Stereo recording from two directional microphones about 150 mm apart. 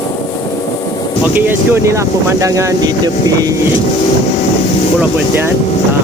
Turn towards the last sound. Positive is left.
turn(degrees=-15)  # may be behind; listen again after turning